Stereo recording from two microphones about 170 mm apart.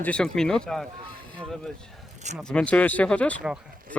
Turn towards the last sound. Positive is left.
turn(degrees=5)  # may be behind; listen again after turning